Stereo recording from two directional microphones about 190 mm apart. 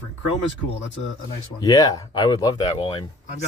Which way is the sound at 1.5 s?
20° left (ahead or behind).